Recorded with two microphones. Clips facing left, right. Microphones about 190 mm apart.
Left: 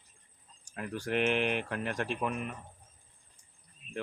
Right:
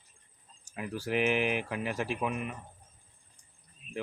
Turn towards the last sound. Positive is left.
turn(degrees=-5)  # may be behind; listen again after turning